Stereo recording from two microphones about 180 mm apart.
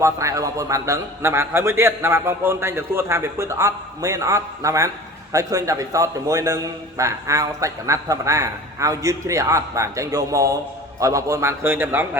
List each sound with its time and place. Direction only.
0.0 s a man's voice: 15° right (ahead or behind)